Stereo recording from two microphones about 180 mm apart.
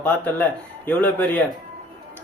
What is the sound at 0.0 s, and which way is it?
Speech, 10° left (ahead or behind).